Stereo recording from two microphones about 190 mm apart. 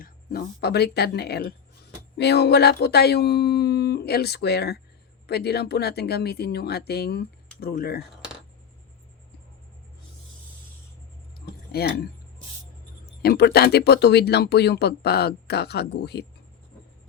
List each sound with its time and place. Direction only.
0.0 s speech: 50° left (ahead or behind)
11.3 s a sound: 55° left (ahead or behind)
13.2 s speech: 60° left (ahead or behind)